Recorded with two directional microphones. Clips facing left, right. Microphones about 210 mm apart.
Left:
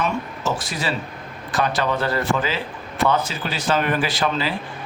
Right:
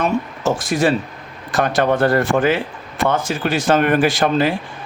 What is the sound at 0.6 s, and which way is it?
Speech, 50° right (ahead or behind).